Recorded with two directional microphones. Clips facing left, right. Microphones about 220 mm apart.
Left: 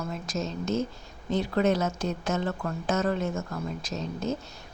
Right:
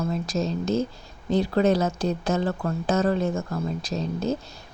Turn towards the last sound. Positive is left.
turn(degrees=-35)  # may be behind; listen again after turning